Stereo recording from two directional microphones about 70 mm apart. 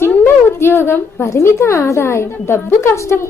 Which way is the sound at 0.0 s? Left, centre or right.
Left.